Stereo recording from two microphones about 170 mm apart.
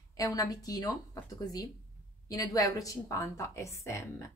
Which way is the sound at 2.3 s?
20° left (ahead or behind).